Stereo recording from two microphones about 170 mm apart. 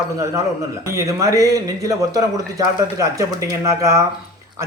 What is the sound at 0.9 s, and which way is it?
A man's voice, 15° right (ahead or behind).